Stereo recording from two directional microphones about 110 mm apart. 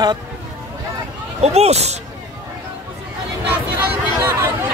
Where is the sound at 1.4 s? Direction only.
75° right (ahead or behind).